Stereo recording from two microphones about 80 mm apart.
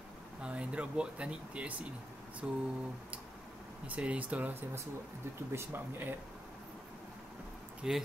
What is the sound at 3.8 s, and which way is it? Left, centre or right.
Speech, centre.